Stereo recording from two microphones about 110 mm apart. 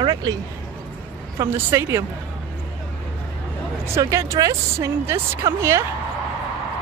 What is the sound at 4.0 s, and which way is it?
A woman's voice, 30° right (ahead or behind).